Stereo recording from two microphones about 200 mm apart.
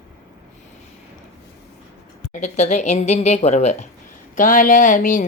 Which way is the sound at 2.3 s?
35° left (ahead or behind).